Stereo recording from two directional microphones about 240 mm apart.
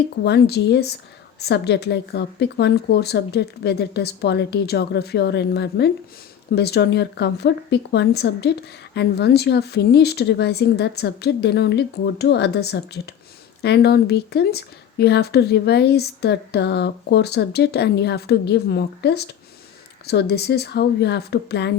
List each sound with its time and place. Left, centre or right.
0.3 s speech: left